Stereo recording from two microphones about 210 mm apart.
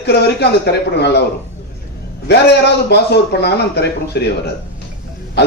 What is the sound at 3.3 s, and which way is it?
Speech, 50° left (ahead or behind).